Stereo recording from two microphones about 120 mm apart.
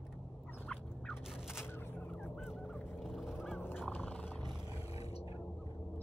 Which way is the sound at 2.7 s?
20° left (ahead or behind).